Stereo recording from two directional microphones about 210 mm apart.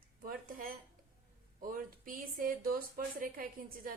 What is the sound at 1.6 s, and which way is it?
Speech, 40° right (ahead or behind).